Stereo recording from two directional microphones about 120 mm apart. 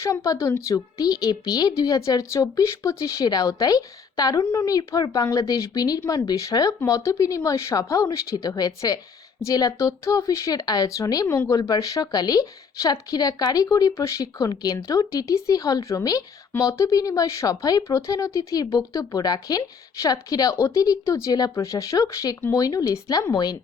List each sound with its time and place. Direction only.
0.0 s speech: 25° left (ahead or behind)